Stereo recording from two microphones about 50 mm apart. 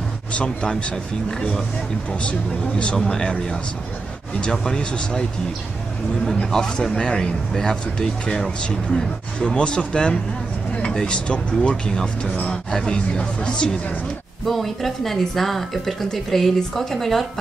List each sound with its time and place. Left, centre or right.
0.3 s speech: left
2.8 s speech: centre
4.4 s speech: centre
6.2 s speech: centre
14.4 s speech: centre